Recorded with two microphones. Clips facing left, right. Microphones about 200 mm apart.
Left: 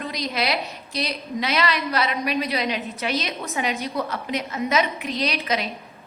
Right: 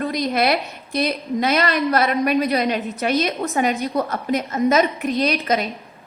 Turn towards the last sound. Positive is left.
turn(degrees=-45)  # may be behind; listen again after turning